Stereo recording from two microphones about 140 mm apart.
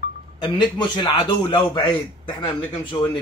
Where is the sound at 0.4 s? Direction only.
35° left (ahead or behind).